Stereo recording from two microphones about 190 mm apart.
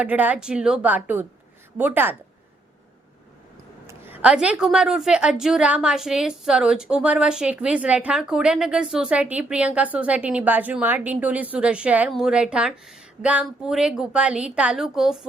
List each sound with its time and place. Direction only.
0.0 s a woman's voice: 10° right (ahead or behind)
3.8 s a woman's voice: 10° right (ahead or behind)